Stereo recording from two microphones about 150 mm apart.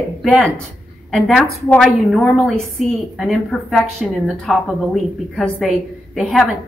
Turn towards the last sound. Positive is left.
turn(degrees=0)  # may be behind; listen again after turning